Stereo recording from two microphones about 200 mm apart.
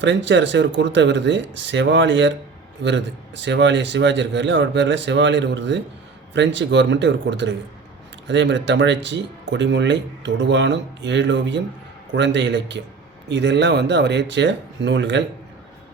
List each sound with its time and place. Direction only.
0.0 s speech: 65° right (ahead or behind)